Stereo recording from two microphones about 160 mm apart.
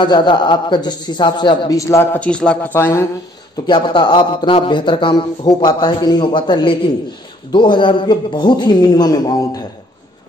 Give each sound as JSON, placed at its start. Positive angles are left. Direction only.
{"t": 0.0, "sound": "a man's voice", "side_deg": 30}
{"t": 2.1, "sound": "a man's voice", "side_deg": 5}
{"t": 3.6, "sound": "a man's voice", "side_deg": 30}